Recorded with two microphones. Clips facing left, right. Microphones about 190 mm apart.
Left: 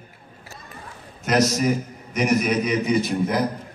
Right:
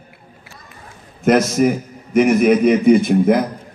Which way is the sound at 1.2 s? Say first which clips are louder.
Right 6 dB; 55° right (ahead or behind).